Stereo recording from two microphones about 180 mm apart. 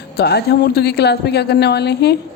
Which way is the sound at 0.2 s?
65° left (ahead or behind).